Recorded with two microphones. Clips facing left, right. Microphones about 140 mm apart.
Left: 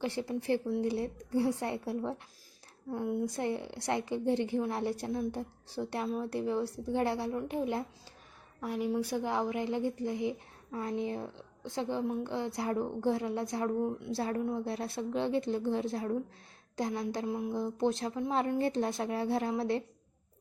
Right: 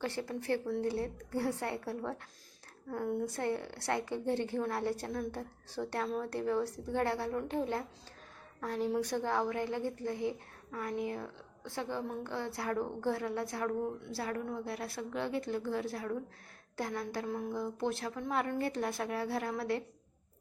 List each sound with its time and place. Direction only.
0.0 s a woman's voice: 15° left (ahead or behind)